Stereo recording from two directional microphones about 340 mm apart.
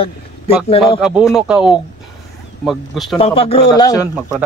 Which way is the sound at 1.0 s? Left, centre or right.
Centre.